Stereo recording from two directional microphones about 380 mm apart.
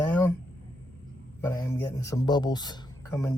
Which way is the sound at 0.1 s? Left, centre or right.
Centre.